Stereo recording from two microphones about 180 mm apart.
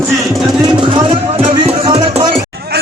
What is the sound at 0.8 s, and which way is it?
Music, 25° right (ahead or behind).